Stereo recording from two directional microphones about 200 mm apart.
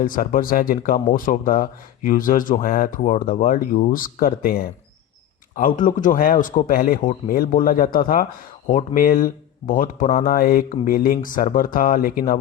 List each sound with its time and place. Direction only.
0.0 s speech: 45° left (ahead or behind)